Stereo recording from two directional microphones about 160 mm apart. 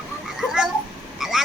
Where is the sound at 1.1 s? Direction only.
Centre (ahead or behind).